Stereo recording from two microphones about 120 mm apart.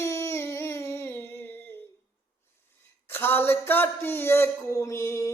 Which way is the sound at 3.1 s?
20° left (ahead or behind).